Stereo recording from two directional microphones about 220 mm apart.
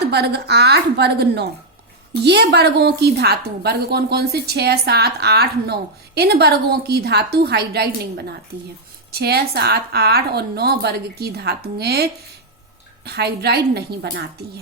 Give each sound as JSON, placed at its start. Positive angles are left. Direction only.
{"t": 0.1, "sound": "a woman's voice", "side_deg": -50}
{"t": 13.1, "sound": "a woman's voice", "side_deg": -45}